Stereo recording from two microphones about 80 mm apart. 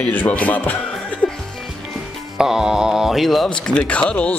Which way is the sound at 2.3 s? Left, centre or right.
Centre.